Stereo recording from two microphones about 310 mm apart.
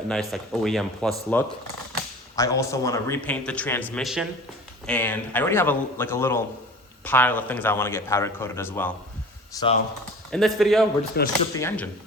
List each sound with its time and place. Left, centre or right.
0.1 s a man's voice: centre
10.3 s a man's voice: centre
11.2 s speech: left
11.5 s a man's voice: centre